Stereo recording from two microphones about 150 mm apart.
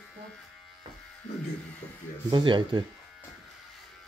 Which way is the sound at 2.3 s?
30° right (ahead or behind).